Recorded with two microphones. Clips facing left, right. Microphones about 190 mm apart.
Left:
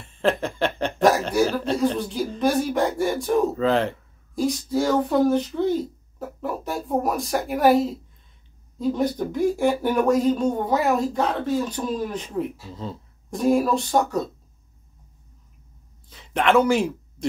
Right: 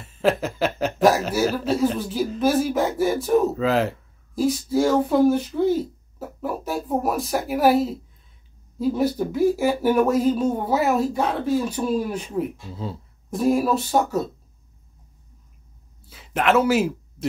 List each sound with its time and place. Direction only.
0.0 s speech: 5° right (ahead or behind)
16.1 s speech: 5° right (ahead or behind)